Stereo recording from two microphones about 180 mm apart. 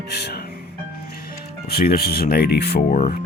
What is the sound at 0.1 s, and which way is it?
Music, 60° left (ahead or behind).